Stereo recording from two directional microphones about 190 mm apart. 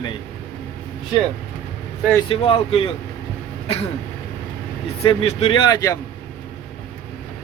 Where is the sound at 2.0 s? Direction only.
10° left (ahead or behind).